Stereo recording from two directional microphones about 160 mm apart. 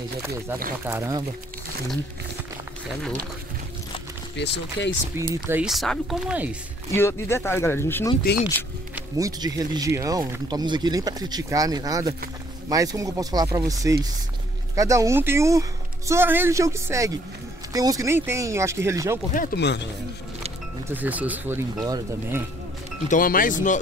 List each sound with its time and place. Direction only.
0.8 s speech: 15° right (ahead or behind)
4.4 s speech: 90° left
5.1 s speech: 15° right (ahead or behind)
5.7 s speech: centre (ahead or behind)
6.9 s speech: 15° left (ahead or behind)
9.1 s speech: 20° right (ahead or behind)
19.3 s speech: 65° left (ahead or behind); by 19.9 s 90° left
20.9 s speech: 10° right (ahead or behind)
21.8 s speech: 25° right (ahead or behind)
23.0 s speech: 60° left (ahead or behind)